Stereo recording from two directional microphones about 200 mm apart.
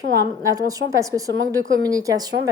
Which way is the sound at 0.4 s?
15° right (ahead or behind).